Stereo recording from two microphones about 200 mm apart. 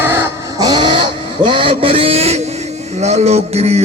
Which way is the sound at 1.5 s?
25° right (ahead or behind).